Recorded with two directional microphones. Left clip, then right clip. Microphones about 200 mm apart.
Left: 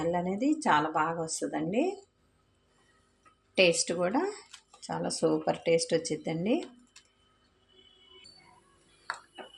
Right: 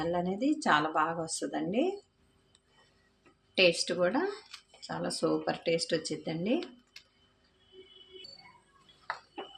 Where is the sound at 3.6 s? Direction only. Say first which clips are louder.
Left 1 dB; 20° left (ahead or behind).